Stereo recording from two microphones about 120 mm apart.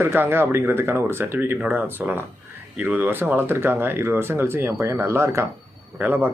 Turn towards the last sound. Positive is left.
turn(degrees=-15)  # may be behind; listen again after turning